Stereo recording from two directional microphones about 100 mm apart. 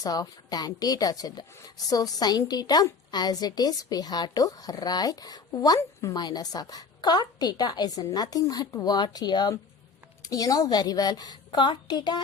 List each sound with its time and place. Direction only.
0.0 s a woman's voice: 40° left (ahead or behind)